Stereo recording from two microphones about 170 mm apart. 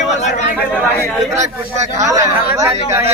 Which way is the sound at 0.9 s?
10° left (ahead or behind).